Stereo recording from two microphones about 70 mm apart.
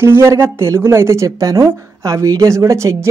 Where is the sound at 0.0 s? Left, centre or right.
Right.